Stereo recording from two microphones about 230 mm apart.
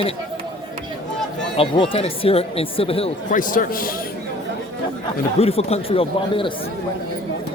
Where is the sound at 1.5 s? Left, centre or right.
Left.